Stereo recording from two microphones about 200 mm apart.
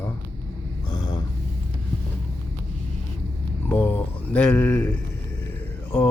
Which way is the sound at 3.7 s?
10° left (ahead or behind).